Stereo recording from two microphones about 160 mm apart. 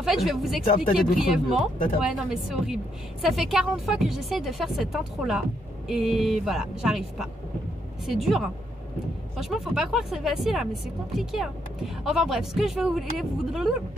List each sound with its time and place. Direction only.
0.0 s a woman's voice: centre (ahead or behind)